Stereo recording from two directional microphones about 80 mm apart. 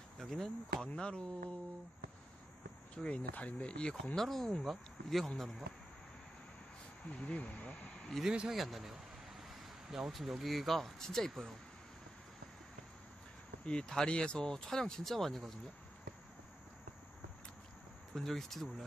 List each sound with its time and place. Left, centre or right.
0.2 s speech: centre
2.9 s speech: centre
7.1 s a sound: centre
8.2 s speech: centre
13.7 s speech: centre
18.1 s speech: centre